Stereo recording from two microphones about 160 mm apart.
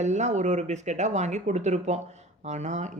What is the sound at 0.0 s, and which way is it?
Speech, 45° right (ahead or behind).